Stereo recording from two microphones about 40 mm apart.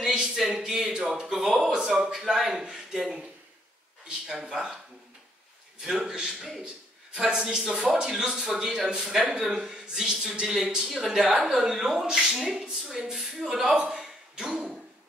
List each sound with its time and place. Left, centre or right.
0.0 s speech: centre
0.8 s speech: right
1.1 s speech: centre
4.3 s speech: centre
5.9 s speech: centre
14.3 s a sound: right